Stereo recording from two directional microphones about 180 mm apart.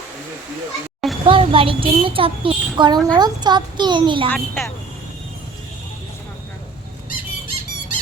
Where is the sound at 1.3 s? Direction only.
30° right (ahead or behind).